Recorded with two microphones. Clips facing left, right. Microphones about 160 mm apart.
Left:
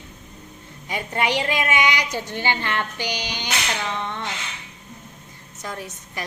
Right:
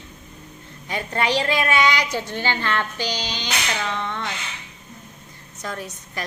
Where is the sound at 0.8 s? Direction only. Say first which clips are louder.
Right 1 dB; 15° left (ahead or behind).